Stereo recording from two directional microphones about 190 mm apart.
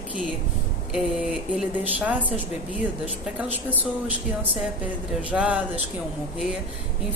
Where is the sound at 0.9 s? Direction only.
Centre (ahead or behind).